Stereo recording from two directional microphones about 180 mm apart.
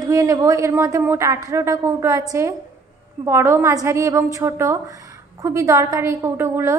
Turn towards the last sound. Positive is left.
turn(degrees=-15)  # may be behind; listen again after turning